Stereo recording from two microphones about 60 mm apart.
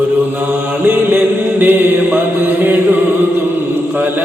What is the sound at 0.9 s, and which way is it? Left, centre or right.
Mantra, right.